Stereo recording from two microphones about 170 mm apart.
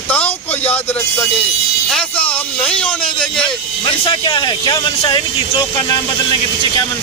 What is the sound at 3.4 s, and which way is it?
Speech, 30° left (ahead or behind).